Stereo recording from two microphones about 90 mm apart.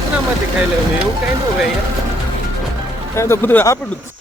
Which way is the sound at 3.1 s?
25° left (ahead or behind).